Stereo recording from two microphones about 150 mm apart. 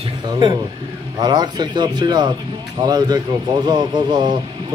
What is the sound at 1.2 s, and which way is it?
Speech, 30° right (ahead or behind).